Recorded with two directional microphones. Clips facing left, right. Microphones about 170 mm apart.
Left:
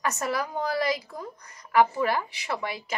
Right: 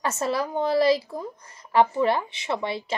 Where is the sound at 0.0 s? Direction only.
25° right (ahead or behind).